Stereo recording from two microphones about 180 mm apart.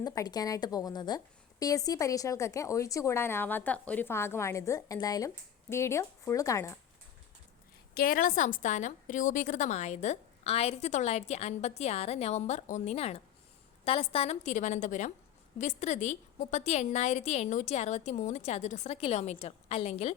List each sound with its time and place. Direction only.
0.0 s a woman's voice: 20° left (ahead or behind)
7.9 s a woman's voice: 55° left (ahead or behind); by 20.1 s 35° left (ahead or behind)